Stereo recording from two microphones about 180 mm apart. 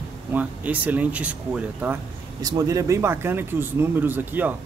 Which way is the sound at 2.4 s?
20° right (ahead or behind).